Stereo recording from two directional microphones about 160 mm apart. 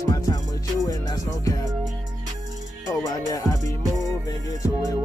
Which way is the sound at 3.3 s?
20° left (ahead or behind).